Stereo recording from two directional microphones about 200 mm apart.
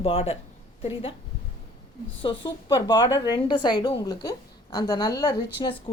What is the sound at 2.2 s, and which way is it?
A woman's voice, 20° left (ahead or behind).